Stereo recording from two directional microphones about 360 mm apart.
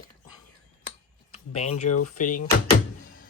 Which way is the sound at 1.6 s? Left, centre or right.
Left.